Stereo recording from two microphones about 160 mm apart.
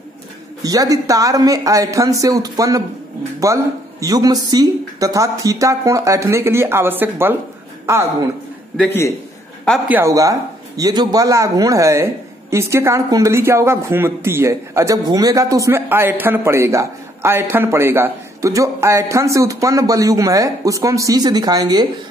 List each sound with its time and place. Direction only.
0.6 s a man's voice: 20° right (ahead or behind)
8.7 s a man's voice: 15° left (ahead or behind)
9.8 s a man's voice: 15° right (ahead or behind)